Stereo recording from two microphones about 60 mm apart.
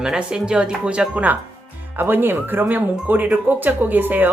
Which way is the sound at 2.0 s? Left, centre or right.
Right.